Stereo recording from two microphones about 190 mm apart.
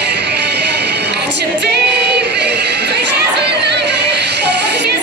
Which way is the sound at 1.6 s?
60° right (ahead or behind).